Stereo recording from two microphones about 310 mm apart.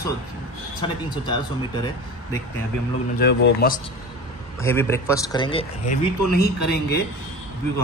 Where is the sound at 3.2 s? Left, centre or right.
Left.